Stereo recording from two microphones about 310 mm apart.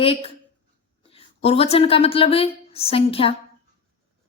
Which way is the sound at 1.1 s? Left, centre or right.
Centre.